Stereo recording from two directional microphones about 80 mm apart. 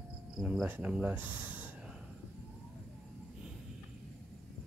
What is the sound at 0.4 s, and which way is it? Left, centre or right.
Speech, centre.